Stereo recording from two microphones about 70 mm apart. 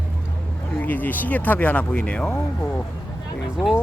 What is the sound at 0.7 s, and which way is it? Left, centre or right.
Speech, left.